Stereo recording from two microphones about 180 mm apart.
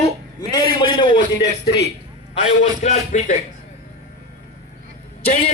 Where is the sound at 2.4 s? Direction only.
40° left (ahead or behind).